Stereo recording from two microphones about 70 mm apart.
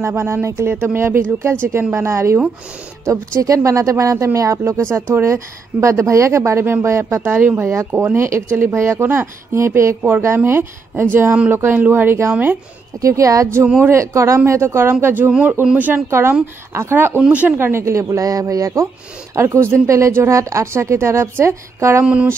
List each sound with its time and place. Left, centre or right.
0.0 s a woman's voice: right
3.1 s a woman's voice: right
13.0 s speech: right
13.7 s a woman's voice: right
17.6 s speech: right
19.3 s speech: right
22.0 s speech: centre